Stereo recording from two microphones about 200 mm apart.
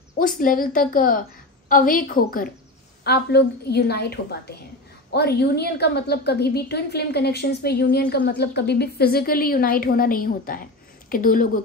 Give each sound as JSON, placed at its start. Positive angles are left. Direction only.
{"t": 0.4, "sound": "a woman's voice", "side_deg": 45}
{"t": 3.0, "sound": "a woman's voice", "side_deg": 55}